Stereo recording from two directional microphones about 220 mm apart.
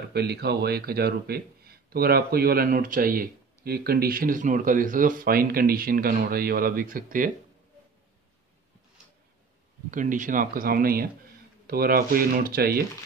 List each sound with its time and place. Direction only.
0.1 s speech: 45° right (ahead or behind)
9.8 s speech: 35° right (ahead or behind)